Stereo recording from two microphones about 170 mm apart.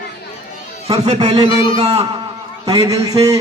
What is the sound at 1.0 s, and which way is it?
Speech, 40° right (ahead or behind).